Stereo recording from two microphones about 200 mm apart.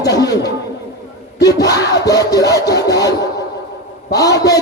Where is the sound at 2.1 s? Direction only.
15° left (ahead or behind).